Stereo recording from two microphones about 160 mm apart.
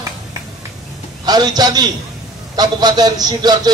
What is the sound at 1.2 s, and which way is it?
A man's voice, 25° right (ahead or behind).